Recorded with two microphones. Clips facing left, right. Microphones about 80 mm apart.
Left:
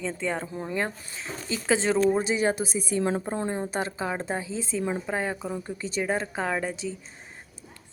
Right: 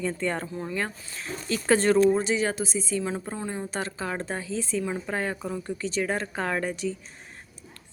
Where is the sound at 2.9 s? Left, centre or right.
Left.